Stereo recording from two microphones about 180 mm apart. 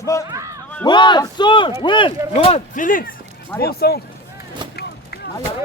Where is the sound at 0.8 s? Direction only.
25° left (ahead or behind); by 3.1 s 50° left (ahead or behind).